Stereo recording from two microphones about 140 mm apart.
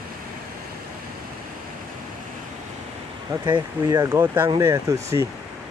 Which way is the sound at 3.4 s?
30° right (ahead or behind).